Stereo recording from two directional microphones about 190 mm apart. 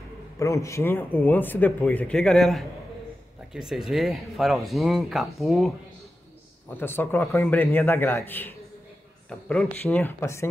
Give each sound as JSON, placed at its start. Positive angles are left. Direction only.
{"t": 0.4, "sound": "speech", "side_deg": 15}
{"t": 6.7, "sound": "speech", "side_deg": 10}